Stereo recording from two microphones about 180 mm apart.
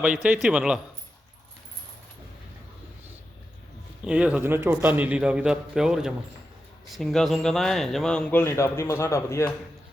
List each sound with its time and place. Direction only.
0.0 s a man's voice: 10° right (ahead or behind)
4.0 s a man's voice: 5° right (ahead or behind); by 9.5 s 15° left (ahead or behind)